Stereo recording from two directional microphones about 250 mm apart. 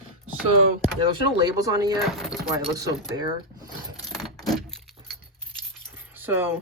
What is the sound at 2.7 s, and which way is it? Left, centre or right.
Speech, centre.